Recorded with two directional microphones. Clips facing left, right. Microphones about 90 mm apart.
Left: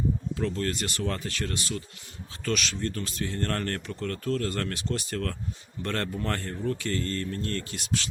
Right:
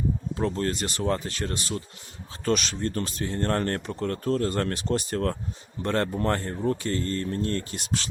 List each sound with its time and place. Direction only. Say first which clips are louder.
0.3 s speech: right 3 dB; 30° right (ahead or behind)